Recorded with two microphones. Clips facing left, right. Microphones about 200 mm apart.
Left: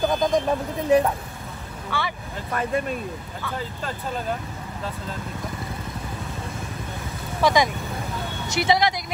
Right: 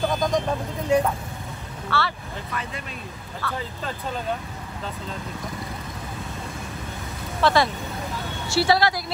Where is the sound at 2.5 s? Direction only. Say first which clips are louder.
Left 11 dB; 50° left (ahead or behind).